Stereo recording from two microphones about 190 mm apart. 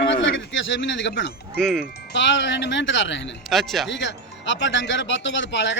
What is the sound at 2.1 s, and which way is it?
Speech, 75° left (ahead or behind).